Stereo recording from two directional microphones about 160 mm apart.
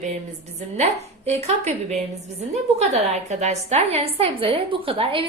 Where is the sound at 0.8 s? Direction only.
40° right (ahead or behind).